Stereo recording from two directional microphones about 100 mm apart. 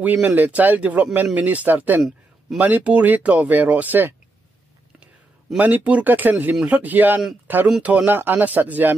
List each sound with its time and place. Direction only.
0.0 s speech: 15° right (ahead or behind)
2.0 s a sound: 5° right (ahead or behind)
2.6 s a man's voice: 15° right (ahead or behind)